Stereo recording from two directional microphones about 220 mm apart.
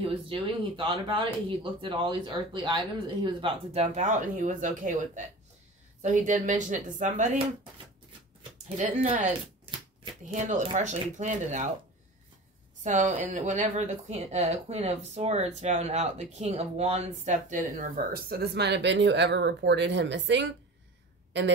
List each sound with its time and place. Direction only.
0.3 s speech: 25° right (ahead or behind)
8.7 s speech: 30° right (ahead or behind)
12.8 s speech: 35° right (ahead or behind); by 20.5 s 55° right (ahead or behind)